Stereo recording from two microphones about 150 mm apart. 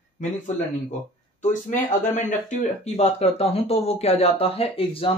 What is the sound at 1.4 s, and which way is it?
Speech, 55° left (ahead or behind).